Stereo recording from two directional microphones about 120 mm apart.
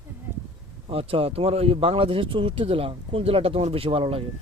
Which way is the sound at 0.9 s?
55° right (ahead or behind).